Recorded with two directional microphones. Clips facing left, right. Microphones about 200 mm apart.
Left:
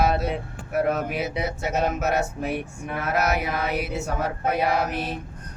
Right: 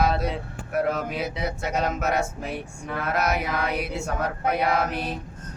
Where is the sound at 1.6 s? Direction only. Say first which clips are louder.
Left 2 dB; centre (ahead or behind).